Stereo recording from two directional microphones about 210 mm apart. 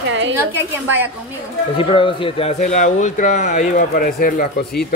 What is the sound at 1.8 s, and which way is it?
Speech, 25° left (ahead or behind).